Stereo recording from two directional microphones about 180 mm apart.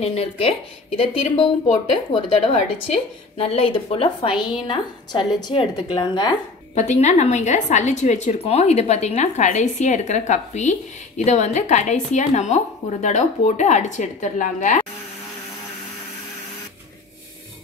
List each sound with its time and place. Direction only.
0.0 s a woman's voice: 30° left (ahead or behind)
6.7 s a woman's voice: 40° left (ahead or behind)